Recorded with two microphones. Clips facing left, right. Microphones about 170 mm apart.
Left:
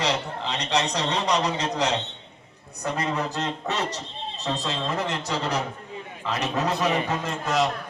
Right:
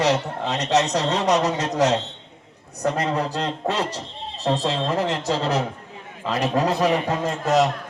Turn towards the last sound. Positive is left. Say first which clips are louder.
# right 5 dB
turn(degrees=-40)  # may be behind; listen again after turning